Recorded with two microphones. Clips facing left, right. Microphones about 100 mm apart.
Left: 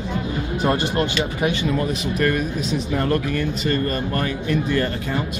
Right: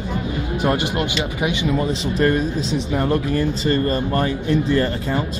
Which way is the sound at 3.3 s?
30° right (ahead or behind).